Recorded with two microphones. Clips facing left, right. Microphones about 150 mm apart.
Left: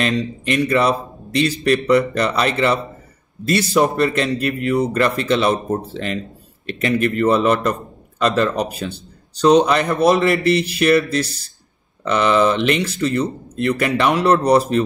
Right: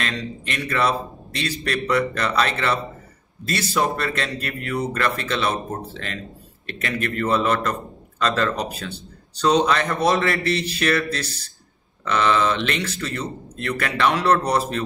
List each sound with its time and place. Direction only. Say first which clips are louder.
0.0 s speech: left 8 dB; 20° left (ahead or behind)